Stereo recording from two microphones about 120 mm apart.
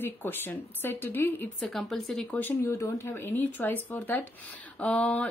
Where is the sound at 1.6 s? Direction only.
Centre (ahead or behind).